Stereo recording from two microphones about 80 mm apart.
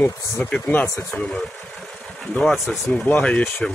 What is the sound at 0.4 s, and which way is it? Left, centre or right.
Speech, left.